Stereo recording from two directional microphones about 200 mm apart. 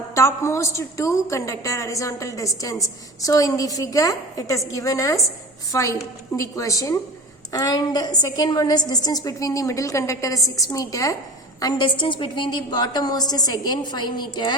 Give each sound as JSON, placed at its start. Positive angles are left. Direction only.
{"t": 0.1, "sound": "a woman's voice", "side_deg": 15}